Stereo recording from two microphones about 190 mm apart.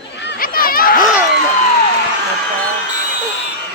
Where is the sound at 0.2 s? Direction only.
65° left (ahead or behind).